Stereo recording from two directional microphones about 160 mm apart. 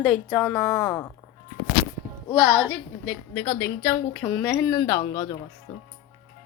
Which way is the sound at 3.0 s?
90° left.